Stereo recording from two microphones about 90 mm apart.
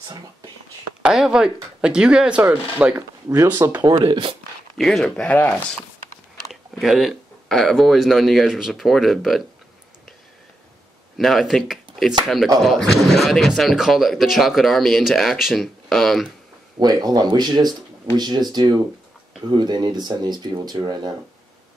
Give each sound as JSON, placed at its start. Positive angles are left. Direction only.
{"t": 1.0, "sound": "speech", "side_deg": -5}
{"t": 4.0, "sound": "speech", "side_deg": -70}
{"t": 4.7, "sound": "speech", "side_deg": 0}
{"t": 6.5, "sound": "speech", "side_deg": 0}
{"t": 11.1, "sound": "speech", "side_deg": 0}
{"t": 16.7, "sound": "speech", "side_deg": -50}